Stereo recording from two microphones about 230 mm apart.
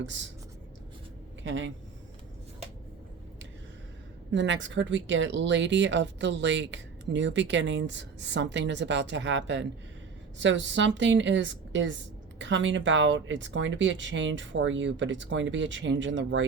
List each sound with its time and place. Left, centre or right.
1.5 s speech: right
4.3 s speech: right